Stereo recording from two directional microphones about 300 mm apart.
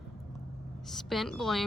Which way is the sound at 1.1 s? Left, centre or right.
Centre.